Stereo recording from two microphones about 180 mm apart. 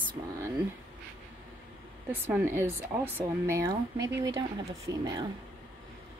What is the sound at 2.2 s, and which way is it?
Speech, 15° right (ahead or behind).